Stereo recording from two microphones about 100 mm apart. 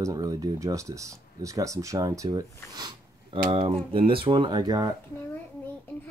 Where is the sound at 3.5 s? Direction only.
60° right (ahead or behind); by 4.9 s 40° right (ahead or behind).